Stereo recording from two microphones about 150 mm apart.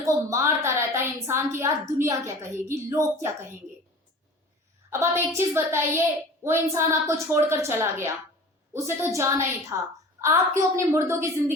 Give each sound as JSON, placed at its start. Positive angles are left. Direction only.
{"t": 0.0, "sound": "a woman's voice", "side_deg": -20}
{"t": 4.9, "sound": "a woman's voice", "side_deg": -15}